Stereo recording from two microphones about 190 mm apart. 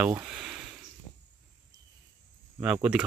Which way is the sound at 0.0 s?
10° right (ahead or behind).